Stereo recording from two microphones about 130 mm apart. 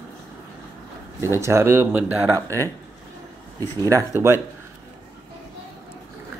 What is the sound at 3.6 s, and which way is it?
Speech, 25° right (ahead or behind).